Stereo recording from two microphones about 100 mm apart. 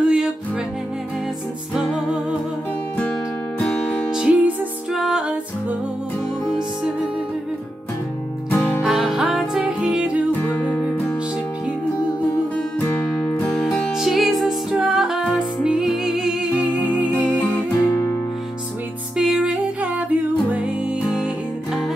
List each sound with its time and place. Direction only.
0.0 s music: 10° right (ahead or behind)
1.7 s music: 5° right (ahead or behind)
3.5 s music: 5° left (ahead or behind)
6.4 s music: centre (ahead or behind)
8.8 s music: centre (ahead or behind)
10.7 s music: 5° left (ahead or behind)
12.5 s music: 15° left (ahead or behind)
13.5 s music: 5° left (ahead or behind); by 17.1 s 15° right (ahead or behind)
17.1 s music: 15° left (ahead or behind)
19.1 s music: 5° right (ahead or behind)